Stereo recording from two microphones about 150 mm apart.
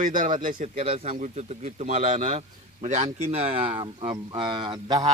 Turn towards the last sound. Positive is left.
turn(degrees=-25)  # may be behind; listen again after turning